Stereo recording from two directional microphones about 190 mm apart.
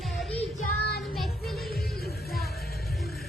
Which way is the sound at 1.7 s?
55° left (ahead or behind).